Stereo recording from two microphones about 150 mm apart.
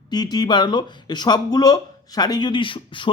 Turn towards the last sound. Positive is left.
turn(degrees=35)  # may be behind; listen again after turning